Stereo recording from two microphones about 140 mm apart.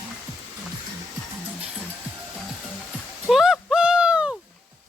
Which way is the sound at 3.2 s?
5° right (ahead or behind).